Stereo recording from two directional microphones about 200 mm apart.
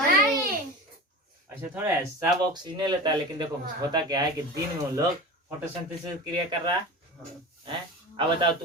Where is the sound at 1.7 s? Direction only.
10° right (ahead or behind).